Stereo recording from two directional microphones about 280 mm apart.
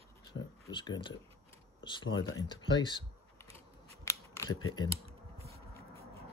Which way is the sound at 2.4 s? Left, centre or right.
Centre.